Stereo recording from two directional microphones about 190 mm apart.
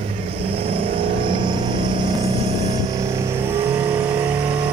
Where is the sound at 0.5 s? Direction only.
30° right (ahead or behind).